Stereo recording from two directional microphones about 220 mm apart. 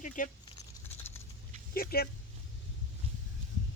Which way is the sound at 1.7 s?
45° left (ahead or behind).